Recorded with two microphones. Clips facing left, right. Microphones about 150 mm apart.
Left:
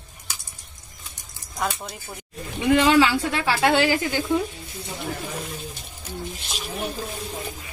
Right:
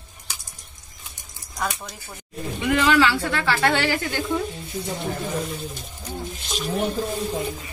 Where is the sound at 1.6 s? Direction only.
30° left (ahead or behind).